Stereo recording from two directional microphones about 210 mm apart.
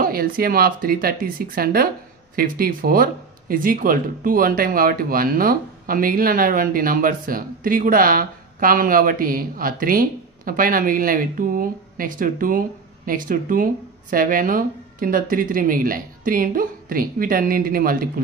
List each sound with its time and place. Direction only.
0.0 s speech: 45° right (ahead or behind)